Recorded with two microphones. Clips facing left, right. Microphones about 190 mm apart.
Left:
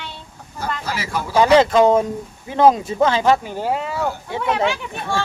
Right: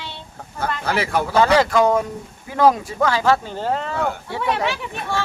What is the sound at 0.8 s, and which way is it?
Speech, 60° right (ahead or behind).